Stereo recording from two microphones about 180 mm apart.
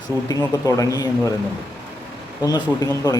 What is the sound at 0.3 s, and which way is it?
Speech, 20° left (ahead or behind).